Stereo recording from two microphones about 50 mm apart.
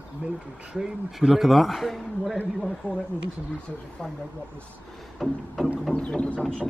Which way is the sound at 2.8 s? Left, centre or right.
Left.